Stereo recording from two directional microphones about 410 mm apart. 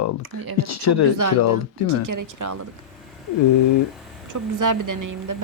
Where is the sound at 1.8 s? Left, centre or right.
Left.